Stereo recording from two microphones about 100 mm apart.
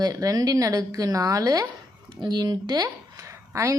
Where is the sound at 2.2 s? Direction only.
45° right (ahead or behind); by 3.7 s 30° right (ahead or behind).